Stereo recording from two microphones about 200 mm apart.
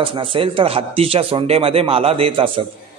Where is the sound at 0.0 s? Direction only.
25° right (ahead or behind).